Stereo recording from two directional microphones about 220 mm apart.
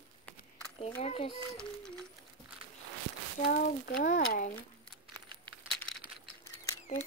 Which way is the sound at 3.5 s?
40° left (ahead or behind).